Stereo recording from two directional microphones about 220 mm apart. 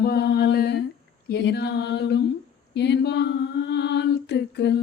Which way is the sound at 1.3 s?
50° left (ahead or behind).